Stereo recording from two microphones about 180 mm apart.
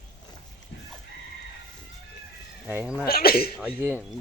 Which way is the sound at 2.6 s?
10° right (ahead or behind).